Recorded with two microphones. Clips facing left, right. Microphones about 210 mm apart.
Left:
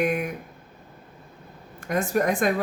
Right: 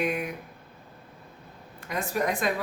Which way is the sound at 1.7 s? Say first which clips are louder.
Left 6 dB; 45° left (ahead or behind).